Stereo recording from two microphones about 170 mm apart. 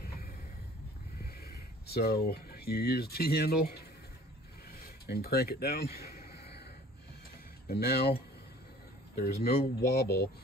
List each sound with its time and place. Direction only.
1.2 s speech: 65° left (ahead or behind)
4.6 s a sound: 60° left (ahead or behind)
7.6 s speech: 65° left (ahead or behind)
9.1 s speech: 65° left (ahead or behind)